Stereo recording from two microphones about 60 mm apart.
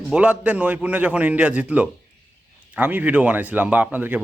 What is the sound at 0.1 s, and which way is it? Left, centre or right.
Speech, centre.